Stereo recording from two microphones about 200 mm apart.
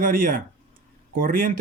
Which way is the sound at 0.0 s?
45° right (ahead or behind).